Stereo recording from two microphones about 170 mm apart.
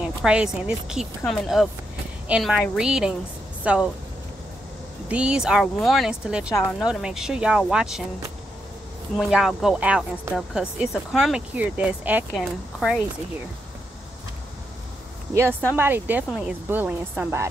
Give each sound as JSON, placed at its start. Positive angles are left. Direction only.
{"t": 0.0, "sound": "a woman's voice", "side_deg": -5}
{"t": 5.0, "sound": "a woman's voice", "side_deg": -5}
{"t": 9.1, "sound": "a woman's voice", "side_deg": 0}
{"t": 15.7, "sound": "speech", "side_deg": -10}